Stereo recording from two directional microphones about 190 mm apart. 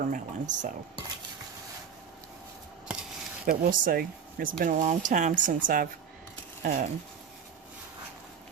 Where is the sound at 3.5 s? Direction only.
45° right (ahead or behind).